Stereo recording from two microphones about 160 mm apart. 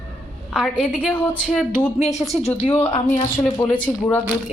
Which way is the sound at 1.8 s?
45° left (ahead or behind).